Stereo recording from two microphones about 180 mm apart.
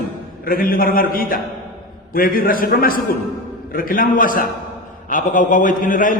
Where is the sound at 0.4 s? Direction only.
55° left (ahead or behind).